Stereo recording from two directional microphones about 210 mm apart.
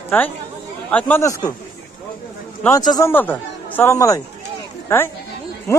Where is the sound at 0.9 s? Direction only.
10° left (ahead or behind).